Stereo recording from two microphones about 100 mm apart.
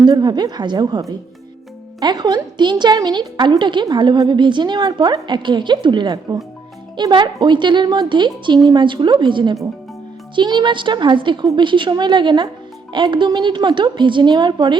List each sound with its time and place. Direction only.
0.0 s a woman's voice: 45° right (ahead or behind)